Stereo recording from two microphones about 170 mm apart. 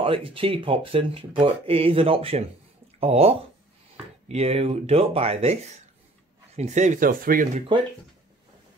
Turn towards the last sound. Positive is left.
turn(degrees=-50)  # may be behind; listen again after turning